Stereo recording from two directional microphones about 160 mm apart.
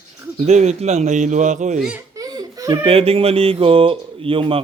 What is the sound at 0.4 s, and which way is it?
Speech, 45° right (ahead or behind).